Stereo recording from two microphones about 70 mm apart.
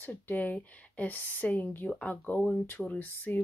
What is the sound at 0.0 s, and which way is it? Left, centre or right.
Speech, left.